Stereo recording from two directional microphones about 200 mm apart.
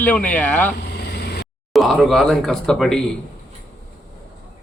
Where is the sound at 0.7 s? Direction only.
55° left (ahead or behind).